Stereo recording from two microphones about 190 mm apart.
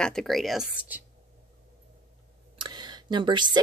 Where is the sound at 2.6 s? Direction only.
25° right (ahead or behind).